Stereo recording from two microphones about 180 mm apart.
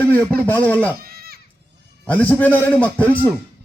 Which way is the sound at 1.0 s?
60° right (ahead or behind).